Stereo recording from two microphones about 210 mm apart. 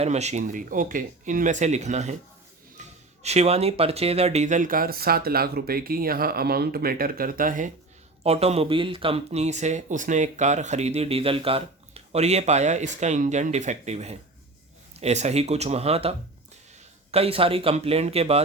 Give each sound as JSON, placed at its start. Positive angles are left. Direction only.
{"t": 0.0, "sound": "speech", "side_deg": -30}
{"t": 2.8, "sound": "a sound", "side_deg": -35}
{"t": 3.2, "sound": "speech", "side_deg": -30}
{"t": 8.2, "sound": "speech", "side_deg": -30}